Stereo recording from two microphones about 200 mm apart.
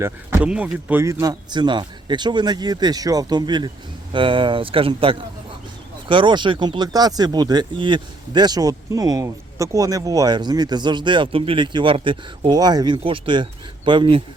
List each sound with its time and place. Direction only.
0.0 s speech: 10° right (ahead or behind); by 14.2 s 25° right (ahead or behind)